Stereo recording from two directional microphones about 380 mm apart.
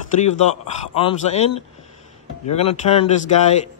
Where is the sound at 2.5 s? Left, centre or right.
Centre.